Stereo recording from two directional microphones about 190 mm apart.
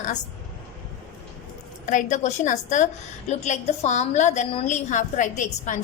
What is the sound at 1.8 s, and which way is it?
A woman's voice, 40° left (ahead or behind).